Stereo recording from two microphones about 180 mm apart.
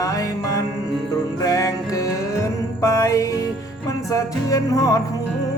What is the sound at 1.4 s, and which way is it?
Music, 20° left (ahead or behind).